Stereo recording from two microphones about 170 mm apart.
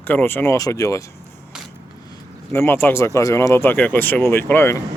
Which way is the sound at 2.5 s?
15° left (ahead or behind).